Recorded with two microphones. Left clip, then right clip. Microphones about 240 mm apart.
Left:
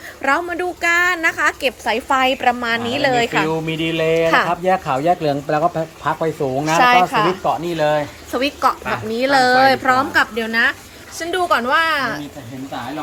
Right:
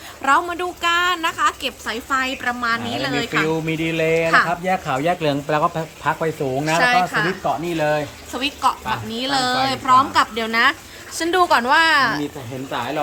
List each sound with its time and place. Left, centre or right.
0.2 s speech: centre
0.9 s speech: right
1.2 s a woman's voice: centre
6.7 s a woman's voice: centre